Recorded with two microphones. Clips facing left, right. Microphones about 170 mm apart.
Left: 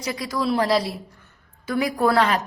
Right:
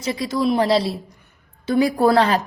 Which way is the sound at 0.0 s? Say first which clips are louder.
Right 4 dB; 25° right (ahead or behind).